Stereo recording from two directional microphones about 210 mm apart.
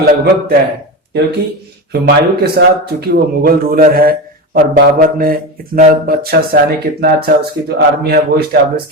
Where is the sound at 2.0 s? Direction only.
50° right (ahead or behind).